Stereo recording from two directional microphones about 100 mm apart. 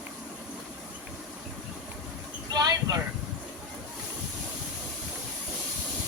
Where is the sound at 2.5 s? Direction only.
40° right (ahead or behind).